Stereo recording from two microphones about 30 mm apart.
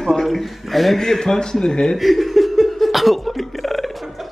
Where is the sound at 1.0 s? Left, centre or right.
Centre.